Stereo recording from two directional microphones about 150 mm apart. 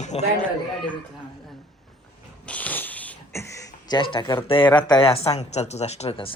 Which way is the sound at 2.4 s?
10° left (ahead or behind).